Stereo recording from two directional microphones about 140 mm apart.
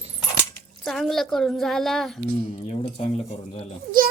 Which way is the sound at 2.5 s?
50° left (ahead or behind).